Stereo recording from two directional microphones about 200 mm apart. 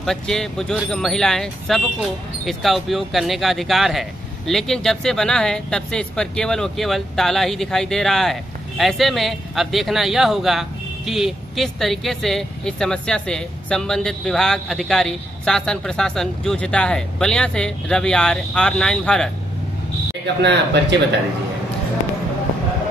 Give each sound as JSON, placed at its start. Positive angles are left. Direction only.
{"t": 0.0, "sound": "speech", "side_deg": 0}
{"t": 20.4, "sound": "speech", "side_deg": -60}